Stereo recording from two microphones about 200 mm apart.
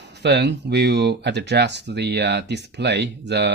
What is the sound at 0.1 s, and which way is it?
Speech, 60° right (ahead or behind).